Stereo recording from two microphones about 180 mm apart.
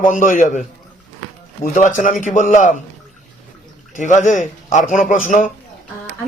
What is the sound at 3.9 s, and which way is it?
A man's voice, 45° left (ahead or behind).